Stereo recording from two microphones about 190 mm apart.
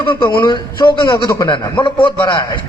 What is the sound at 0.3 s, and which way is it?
A man's voice, 25° left (ahead or behind).